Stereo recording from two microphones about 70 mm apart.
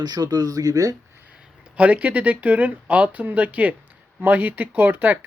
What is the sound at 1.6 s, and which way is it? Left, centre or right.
Speech, centre.